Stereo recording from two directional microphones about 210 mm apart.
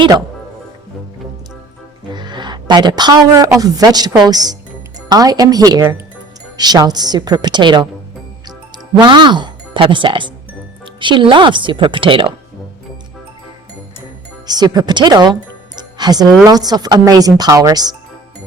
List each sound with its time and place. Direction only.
2.1 s a sound: 20° right (ahead or behind)
3.6 s a woman's voice: 20° right (ahead or behind)
9.0 s speech: 20° right (ahead or behind)
14.4 s speech: 20° right (ahead or behind)
15.8 s music: 20° right (ahead or behind)
16.5 s speech: 20° right (ahead or behind)